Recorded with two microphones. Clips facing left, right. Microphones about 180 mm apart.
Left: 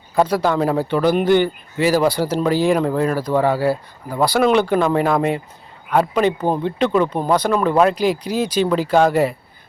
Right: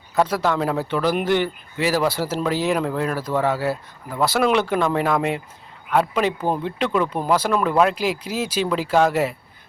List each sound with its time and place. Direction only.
0.2 s speech: centre (ahead or behind)
3.3 s speech: 30° left (ahead or behind)
4.1 s speech: centre (ahead or behind)